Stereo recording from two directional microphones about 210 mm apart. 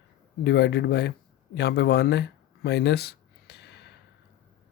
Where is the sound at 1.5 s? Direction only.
50° left (ahead or behind).